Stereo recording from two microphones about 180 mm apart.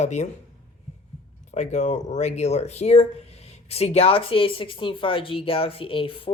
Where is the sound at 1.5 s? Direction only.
40° left (ahead or behind).